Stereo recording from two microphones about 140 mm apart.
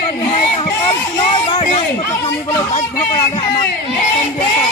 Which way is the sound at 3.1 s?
25° left (ahead or behind).